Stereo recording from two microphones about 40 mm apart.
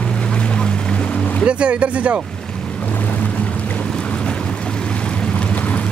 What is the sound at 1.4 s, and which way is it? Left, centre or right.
Speech, right.